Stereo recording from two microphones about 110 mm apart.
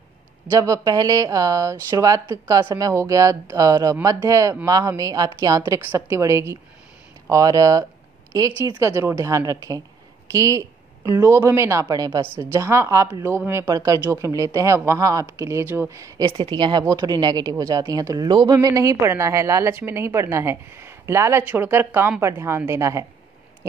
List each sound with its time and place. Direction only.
0.5 s speech: 30° right (ahead or behind)
16.3 s speech: 50° right (ahead or behind)
16.8 s speech: 35° right (ahead or behind)